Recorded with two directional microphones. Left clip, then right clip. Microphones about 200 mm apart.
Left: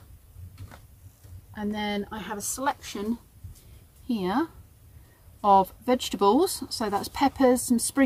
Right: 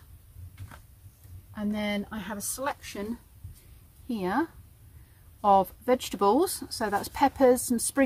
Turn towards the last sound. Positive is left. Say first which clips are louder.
# left 1 dB
turn(degrees=10)  # may be behind; listen again after turning